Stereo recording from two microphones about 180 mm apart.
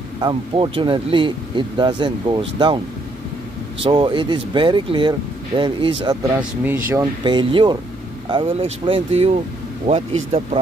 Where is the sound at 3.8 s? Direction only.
25° right (ahead or behind).